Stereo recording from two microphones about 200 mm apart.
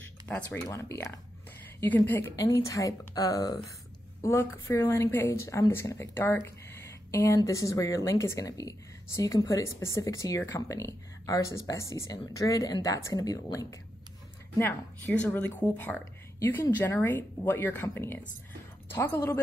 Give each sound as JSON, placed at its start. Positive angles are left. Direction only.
{"t": 0.0, "sound": "a woman's voice", "side_deg": 10}